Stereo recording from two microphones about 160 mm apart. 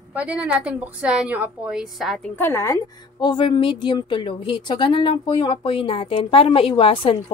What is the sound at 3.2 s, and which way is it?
A woman's voice, 30° left (ahead or behind).